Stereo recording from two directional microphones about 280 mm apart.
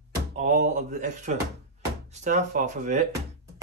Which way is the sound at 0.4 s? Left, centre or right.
Right.